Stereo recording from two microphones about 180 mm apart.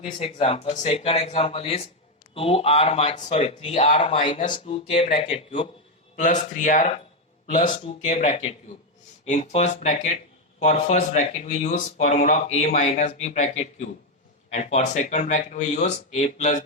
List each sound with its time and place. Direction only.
0.0 s speech: 35° left (ahead or behind)
4.3 s speech: 45° left (ahead or behind)
4.6 s speech: 30° left (ahead or behind)
6.1 s speech: 45° left (ahead or behind)